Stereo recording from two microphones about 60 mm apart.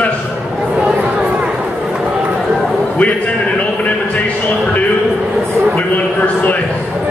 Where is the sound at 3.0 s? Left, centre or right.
Left.